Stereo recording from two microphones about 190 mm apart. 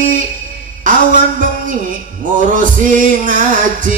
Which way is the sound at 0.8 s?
45° right (ahead or behind).